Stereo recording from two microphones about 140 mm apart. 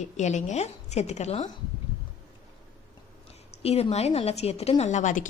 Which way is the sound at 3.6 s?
45° left (ahead or behind).